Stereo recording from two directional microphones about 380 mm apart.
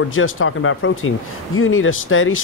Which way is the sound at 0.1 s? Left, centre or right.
Left.